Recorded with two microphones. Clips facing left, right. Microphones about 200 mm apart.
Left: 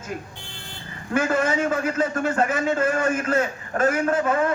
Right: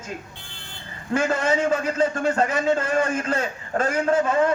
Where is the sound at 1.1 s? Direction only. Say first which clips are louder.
Even; 30° right (ahead or behind).